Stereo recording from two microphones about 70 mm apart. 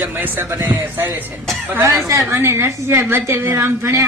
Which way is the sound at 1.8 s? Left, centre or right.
Right.